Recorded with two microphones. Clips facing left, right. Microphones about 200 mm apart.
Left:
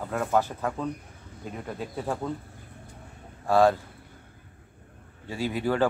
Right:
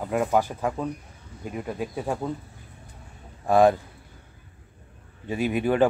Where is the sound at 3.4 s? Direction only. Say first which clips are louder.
Right 2 dB; 20° right (ahead or behind).